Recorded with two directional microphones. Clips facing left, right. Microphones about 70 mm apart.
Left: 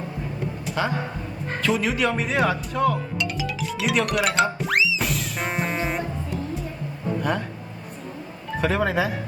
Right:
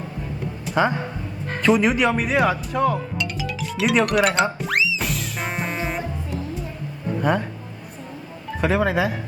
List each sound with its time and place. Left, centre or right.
0.8 s a man's voice: right
1.9 s speech: centre
4.6 s music: centre
7.2 s a man's voice: centre
8.6 s speech: centre